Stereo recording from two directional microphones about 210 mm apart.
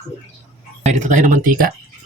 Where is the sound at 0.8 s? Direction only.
35° right (ahead or behind).